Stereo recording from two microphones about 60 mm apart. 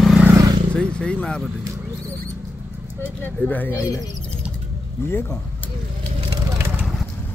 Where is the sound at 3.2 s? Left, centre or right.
Left.